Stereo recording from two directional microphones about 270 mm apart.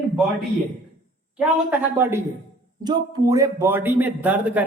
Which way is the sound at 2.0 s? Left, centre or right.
Centre.